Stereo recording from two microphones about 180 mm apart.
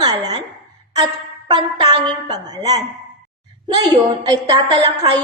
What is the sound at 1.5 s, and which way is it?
A woman's voice, 20° right (ahead or behind).